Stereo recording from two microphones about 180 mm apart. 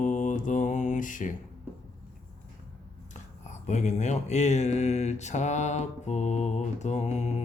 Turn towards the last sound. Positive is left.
turn(degrees=40)  # may be behind; listen again after turning